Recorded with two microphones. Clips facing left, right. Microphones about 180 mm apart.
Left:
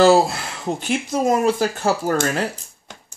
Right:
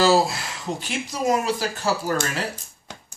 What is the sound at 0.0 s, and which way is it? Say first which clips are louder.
Speech: left 5 dB; 55° left (ahead or behind).